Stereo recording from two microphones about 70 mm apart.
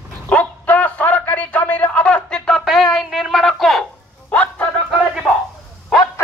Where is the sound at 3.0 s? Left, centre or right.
Centre.